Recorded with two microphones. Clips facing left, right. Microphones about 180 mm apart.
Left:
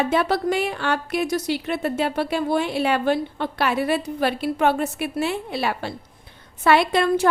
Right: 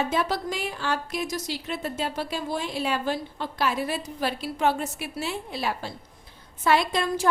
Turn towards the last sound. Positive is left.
turn(degrees=65)  # may be behind; listen again after turning